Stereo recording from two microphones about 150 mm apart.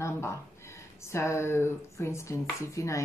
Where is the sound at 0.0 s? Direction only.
20° left (ahead or behind).